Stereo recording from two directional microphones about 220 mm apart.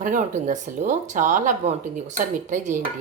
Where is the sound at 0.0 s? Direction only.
35° right (ahead or behind).